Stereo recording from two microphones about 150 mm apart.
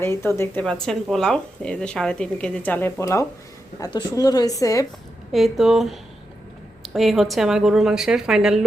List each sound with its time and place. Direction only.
0.0 s speech: 15° left (ahead or behind)
0.6 s a woman's voice: 5° left (ahead or behind); by 4.9 s 20° left (ahead or behind)
5.3 s a woman's voice: centre (ahead or behind)